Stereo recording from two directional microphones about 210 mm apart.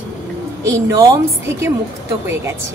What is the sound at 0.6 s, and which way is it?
Speech, 15° right (ahead or behind).